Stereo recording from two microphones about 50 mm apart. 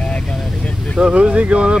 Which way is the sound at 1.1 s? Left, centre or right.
Right.